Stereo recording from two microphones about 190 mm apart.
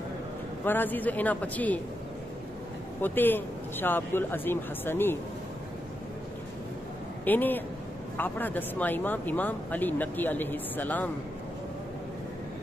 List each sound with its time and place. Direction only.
0.7 s speech: 10° left (ahead or behind)
3.0 s speech: 10° left (ahead or behind)
7.2 s speech: 10° left (ahead or behind)